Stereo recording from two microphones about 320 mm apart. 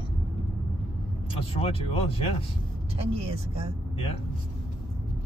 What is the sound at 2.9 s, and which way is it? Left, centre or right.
Speech, centre.